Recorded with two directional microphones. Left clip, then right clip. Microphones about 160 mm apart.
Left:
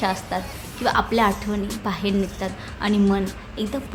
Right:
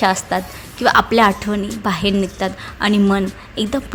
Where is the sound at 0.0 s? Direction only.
40° right (ahead or behind).